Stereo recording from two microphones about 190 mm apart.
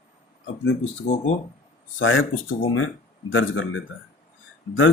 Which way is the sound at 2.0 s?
90° left.